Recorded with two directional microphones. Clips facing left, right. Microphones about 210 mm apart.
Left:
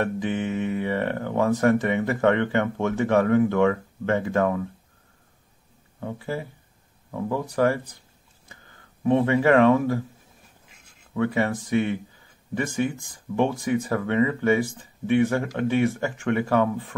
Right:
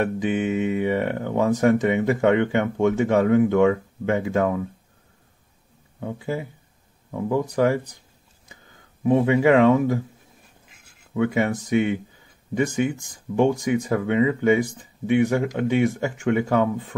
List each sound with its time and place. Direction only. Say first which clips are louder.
0.0 s speech: right 3 dB; 15° right (ahead or behind)
5.9 s speech: right 2 dB; 15° right (ahead or behind)
9.0 s speech: right 2 dB; 15° right (ahead or behind)
11.1 s speech: right 2 dB; 15° right (ahead or behind)